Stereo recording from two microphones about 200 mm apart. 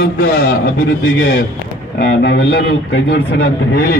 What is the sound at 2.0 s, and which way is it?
A man's voice, 60° left (ahead or behind).